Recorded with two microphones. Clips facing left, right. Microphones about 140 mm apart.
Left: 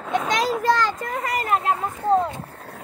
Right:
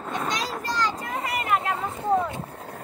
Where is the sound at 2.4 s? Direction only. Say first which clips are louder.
Right 1 dB; 15° right (ahead or behind).